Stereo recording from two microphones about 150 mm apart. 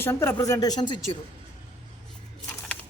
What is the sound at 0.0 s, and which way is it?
Speech, 15° left (ahead or behind).